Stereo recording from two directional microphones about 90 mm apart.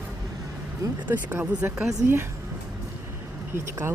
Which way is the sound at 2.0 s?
25° right (ahead or behind).